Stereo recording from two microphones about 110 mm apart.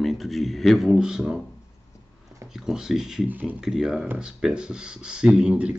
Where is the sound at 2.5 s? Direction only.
5° right (ahead or behind).